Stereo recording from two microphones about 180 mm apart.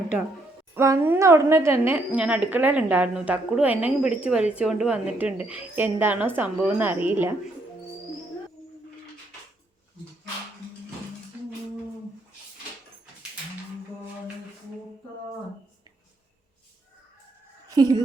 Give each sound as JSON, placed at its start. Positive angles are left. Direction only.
{"t": 0.7, "sound": "a woman's voice", "side_deg": -15}
{"t": 17.8, "sound": "a woman's voice", "side_deg": -20}